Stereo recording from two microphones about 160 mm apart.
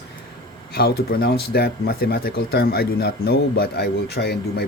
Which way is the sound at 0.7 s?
75° left (ahead or behind).